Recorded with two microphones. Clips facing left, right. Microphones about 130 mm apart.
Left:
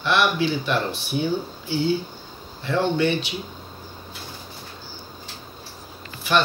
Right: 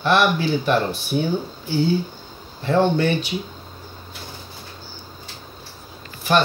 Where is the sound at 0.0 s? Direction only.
45° right (ahead or behind).